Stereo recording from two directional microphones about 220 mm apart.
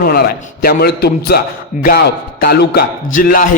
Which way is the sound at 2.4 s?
45° left (ahead or behind).